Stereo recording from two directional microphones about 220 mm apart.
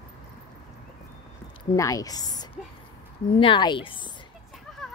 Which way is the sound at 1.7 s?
15° left (ahead or behind).